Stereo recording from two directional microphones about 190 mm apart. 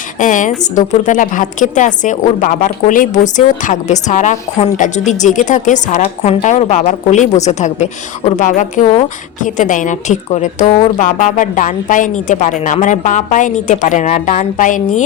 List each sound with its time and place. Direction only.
0.2 s a woman's voice: 40° left (ahead or behind)